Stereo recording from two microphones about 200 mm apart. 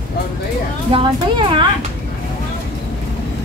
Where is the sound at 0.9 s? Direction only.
25° right (ahead or behind).